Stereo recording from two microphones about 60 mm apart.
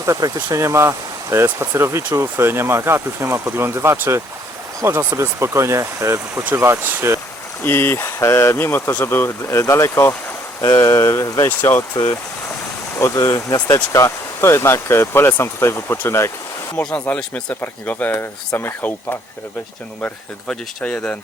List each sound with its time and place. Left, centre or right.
0.0 s speech: right
6.3 s speech: right
7.6 s speech: left
13.0 s speech: left
13.7 s speech: left
16.8 s speech: left
20.5 s speech: centre